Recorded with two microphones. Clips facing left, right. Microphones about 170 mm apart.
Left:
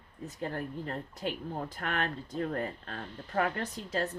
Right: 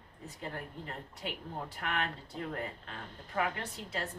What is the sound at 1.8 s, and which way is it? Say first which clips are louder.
A woman's voice: left 2 dB; 40° left (ahead or behind).